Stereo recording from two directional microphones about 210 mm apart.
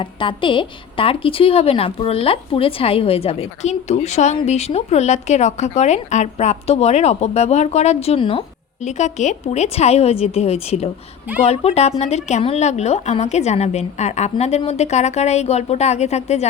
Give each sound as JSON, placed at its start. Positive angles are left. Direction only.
{"t": 0.0, "sound": "a woman's voice", "side_deg": 25}